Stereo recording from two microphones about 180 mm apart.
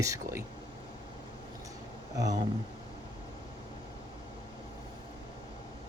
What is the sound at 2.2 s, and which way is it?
Speech, 20° right (ahead or behind).